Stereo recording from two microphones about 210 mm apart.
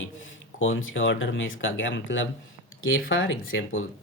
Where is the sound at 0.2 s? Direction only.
65° left (ahead or behind).